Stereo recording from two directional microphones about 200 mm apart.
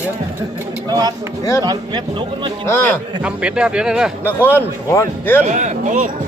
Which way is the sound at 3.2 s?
5° right (ahead or behind).